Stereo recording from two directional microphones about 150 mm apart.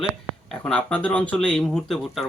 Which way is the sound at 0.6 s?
10° left (ahead or behind).